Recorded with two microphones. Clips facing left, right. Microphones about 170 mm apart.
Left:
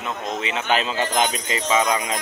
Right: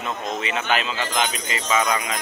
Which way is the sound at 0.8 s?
35° left (ahead or behind).